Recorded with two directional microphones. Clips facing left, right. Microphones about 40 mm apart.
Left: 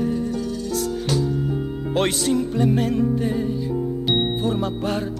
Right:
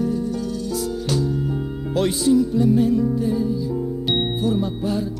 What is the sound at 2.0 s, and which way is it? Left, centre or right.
Music, left.